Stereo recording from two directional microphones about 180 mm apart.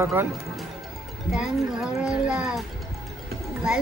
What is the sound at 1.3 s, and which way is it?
Speech, centre (ahead or behind).